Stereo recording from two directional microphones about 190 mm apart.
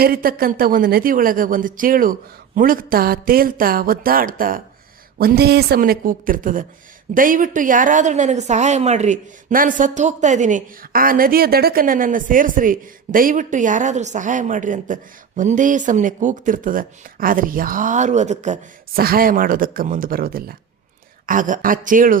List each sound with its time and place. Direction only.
0.0 s a woman's voice: 50° right (ahead or behind)